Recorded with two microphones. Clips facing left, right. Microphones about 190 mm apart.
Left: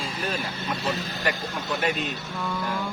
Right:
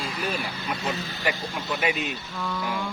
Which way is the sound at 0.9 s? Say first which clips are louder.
Left 1 dB; 40° left (ahead or behind).